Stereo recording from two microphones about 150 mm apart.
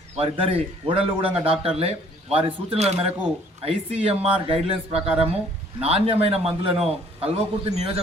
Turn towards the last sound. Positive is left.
turn(degrees=-40)  # may be behind; listen again after turning